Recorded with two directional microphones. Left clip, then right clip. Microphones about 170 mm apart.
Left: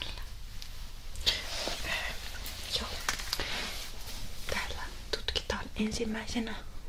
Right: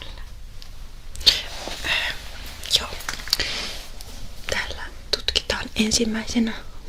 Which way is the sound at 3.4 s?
15° right (ahead or behind).